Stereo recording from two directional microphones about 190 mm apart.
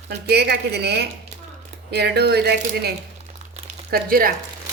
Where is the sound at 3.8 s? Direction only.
50° right (ahead or behind).